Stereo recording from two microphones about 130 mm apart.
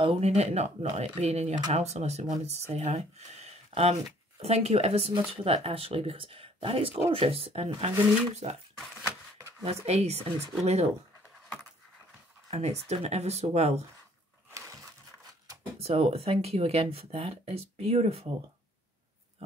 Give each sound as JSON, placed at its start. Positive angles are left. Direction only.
{"t": 0.0, "sound": "speech", "side_deg": -50}
{"t": 9.4, "sound": "a sound", "side_deg": -25}
{"t": 9.8, "sound": "speech", "side_deg": -55}
{"t": 12.4, "sound": "a sound", "side_deg": -55}
{"t": 12.8, "sound": "speech", "side_deg": -55}
{"t": 15.8, "sound": "speech", "side_deg": -50}